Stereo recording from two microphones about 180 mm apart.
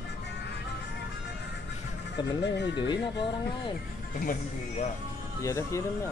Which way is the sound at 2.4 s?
75° left (ahead or behind).